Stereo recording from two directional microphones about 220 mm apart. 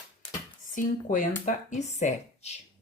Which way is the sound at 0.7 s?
40° left (ahead or behind).